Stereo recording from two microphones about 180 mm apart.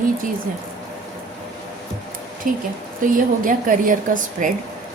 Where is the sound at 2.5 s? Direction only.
50° right (ahead or behind).